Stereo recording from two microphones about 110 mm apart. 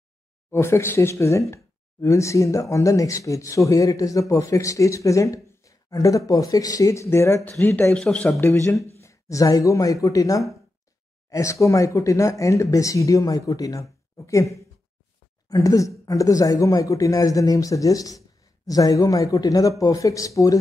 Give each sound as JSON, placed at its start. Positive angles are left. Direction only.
{"t": 0.5, "sound": "speech", "side_deg": 25}
{"t": 8.4, "sound": "speech", "side_deg": 25}